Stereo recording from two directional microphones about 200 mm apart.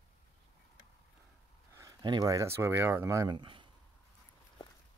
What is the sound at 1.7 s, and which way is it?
Speech, 15° right (ahead or behind).